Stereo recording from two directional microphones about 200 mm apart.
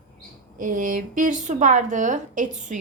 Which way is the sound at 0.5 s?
45° right (ahead or behind).